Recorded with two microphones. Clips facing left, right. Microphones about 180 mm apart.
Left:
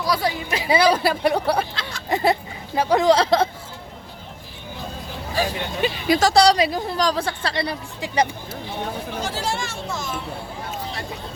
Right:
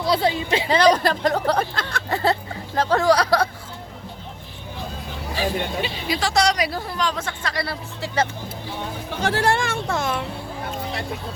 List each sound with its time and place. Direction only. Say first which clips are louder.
0.0 s a woman's voice: right 2 dB; 25° right (ahead or behind)
0.7 s speech: even; 10° left (ahead or behind)
1.7 s a sound: right 4 dB; 55° right (ahead or behind)
2.0 s speech: left 2 dB; 15° left (ahead or behind)
5.3 s speech: even; 45° left (ahead or behind)
6.3 s speech: left 3 dB; 30° left (ahead or behind)
6.7 s speech: left 3 dB; 15° left (ahead or behind)
6.9 s speech: left 4 dB; 35° left (ahead or behind)
7.6 s speech: left 2 dB; 15° left (ahead or behind)
9.2 s speech: right 9 dB; 60° right (ahead or behind)